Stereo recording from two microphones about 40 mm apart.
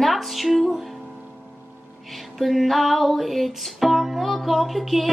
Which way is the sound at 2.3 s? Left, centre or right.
Centre.